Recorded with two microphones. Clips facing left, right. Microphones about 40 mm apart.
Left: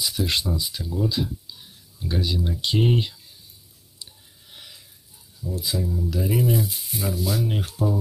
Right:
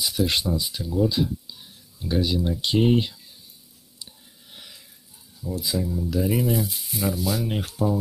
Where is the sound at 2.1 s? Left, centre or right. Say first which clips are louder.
Right 3 dB; centre.